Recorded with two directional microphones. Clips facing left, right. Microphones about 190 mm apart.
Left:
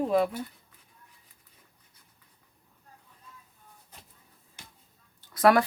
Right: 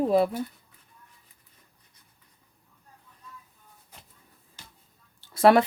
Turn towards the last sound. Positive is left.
turn(degrees=-25)  # may be behind; listen again after turning